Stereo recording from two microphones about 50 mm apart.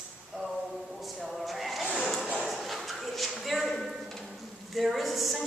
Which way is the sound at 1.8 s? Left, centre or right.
Centre.